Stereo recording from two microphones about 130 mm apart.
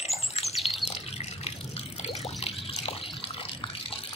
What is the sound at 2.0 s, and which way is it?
Water, 50° left (ahead or behind).